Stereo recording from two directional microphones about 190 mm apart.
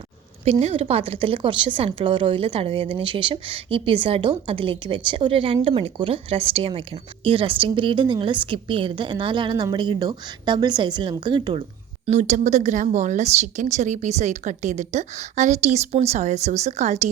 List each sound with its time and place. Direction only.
0.4 s speech: 30° right (ahead or behind)
12.0 s speech: 40° right (ahead or behind)